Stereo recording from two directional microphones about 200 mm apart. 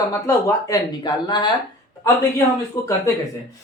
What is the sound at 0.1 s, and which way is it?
Speech, 15° left (ahead or behind).